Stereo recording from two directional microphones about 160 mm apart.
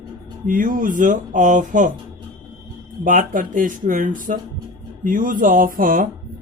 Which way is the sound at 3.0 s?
55° right (ahead or behind).